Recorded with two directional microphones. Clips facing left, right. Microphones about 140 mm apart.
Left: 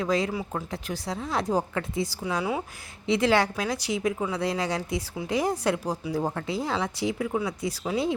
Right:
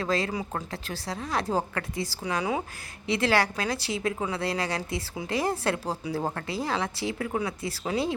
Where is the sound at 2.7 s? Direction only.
20° left (ahead or behind).